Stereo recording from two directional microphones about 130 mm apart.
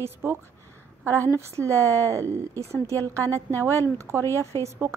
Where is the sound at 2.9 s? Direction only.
15° left (ahead or behind).